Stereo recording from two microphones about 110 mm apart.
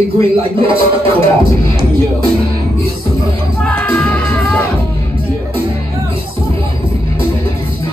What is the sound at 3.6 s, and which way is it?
Music, 15° left (ahead or behind).